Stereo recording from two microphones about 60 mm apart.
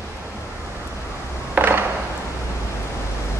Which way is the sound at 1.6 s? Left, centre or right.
Right.